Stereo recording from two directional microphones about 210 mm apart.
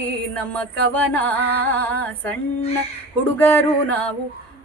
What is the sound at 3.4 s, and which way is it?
Music, 10° left (ahead or behind).